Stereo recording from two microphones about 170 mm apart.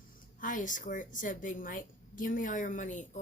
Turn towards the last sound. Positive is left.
turn(degrees=45)  # may be behind; listen again after turning